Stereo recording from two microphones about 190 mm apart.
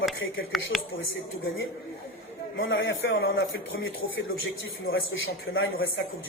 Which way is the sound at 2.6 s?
85° left.